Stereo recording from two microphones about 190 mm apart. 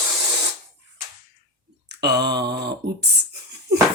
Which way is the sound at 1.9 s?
60° right (ahead or behind).